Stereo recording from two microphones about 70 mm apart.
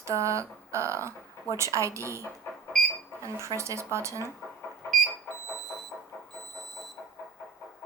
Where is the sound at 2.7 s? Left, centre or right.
Centre.